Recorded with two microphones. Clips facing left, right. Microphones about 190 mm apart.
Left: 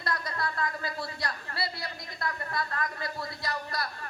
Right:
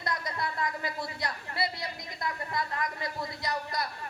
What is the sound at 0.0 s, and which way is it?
Speech, 20° right (ahead or behind).